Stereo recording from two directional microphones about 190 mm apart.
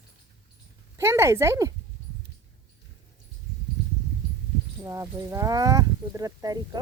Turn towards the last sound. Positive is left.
turn(degrees=-20)  # may be behind; listen again after turning